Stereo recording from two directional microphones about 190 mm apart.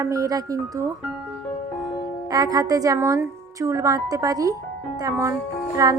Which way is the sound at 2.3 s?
20° right (ahead or behind).